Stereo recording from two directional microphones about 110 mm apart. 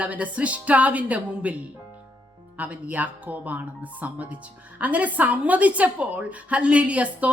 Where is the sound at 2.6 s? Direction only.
15° right (ahead or behind).